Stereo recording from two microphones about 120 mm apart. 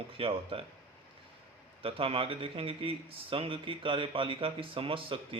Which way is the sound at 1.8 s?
50° right (ahead or behind).